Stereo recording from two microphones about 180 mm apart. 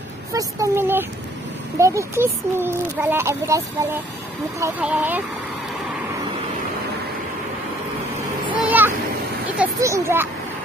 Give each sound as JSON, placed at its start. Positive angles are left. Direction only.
{"t": 0.3, "sound": "speech", "side_deg": -20}
{"t": 8.6, "sound": "a sound", "side_deg": -10}
{"t": 9.6, "sound": "speech", "side_deg": -15}